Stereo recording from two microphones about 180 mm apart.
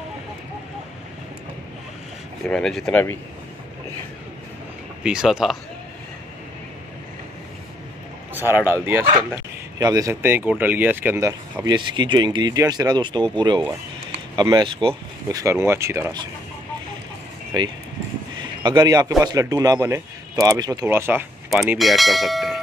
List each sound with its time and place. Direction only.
2.4 s speech: centre (ahead or behind)
5.0 s speech: 5° right (ahead or behind)
8.5 s speech: 10° right (ahead or behind)
18.4 s speech: 25° right (ahead or behind)
21.5 s speech: centre (ahead or behind)